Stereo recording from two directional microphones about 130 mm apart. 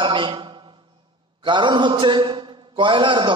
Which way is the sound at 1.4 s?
35° right (ahead or behind).